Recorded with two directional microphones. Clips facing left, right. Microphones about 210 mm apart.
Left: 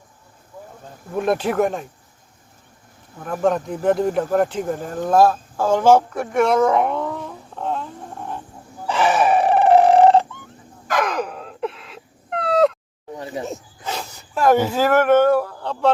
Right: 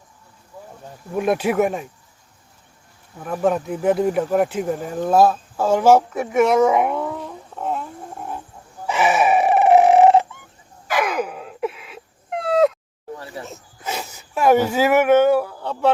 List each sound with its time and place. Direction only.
1.1 s speech: 5° right (ahead or behind)
3.4 s speech: 5° right (ahead or behind)
8.9 s chicken: 10° right (ahead or behind)
10.8 s a sound: 5° right (ahead or behind)
13.1 s a sound: 20° left (ahead or behind)
13.8 s speech: 10° right (ahead or behind)